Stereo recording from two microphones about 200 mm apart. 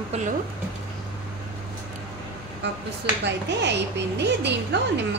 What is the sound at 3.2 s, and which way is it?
Speech, 60° right (ahead or behind).